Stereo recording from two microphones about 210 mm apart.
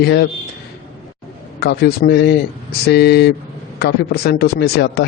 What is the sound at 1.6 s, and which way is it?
A man's voice, 50° left (ahead or behind).